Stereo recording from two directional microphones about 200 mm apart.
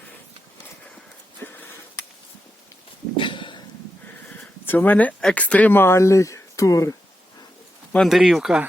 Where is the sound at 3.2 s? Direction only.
25° left (ahead or behind).